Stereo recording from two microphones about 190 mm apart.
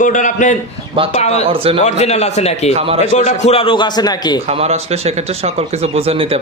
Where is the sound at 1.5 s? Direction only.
30° right (ahead or behind).